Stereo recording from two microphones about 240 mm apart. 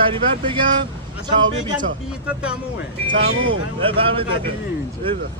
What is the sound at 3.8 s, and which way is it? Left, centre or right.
Speech, right.